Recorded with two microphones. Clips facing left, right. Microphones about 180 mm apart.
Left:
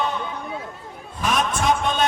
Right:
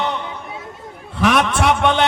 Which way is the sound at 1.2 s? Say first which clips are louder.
Right 6 dB; 75° right (ahead or behind).